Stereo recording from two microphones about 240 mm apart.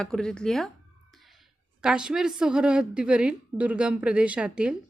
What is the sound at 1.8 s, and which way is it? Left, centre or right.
A woman's voice, centre.